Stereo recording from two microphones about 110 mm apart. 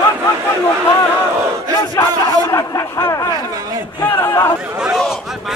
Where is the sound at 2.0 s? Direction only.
25° left (ahead or behind).